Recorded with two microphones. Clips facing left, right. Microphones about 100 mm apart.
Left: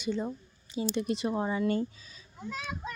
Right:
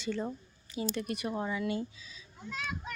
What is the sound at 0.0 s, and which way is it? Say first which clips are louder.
A woman's voice: left 2 dB; 15° left (ahead or behind).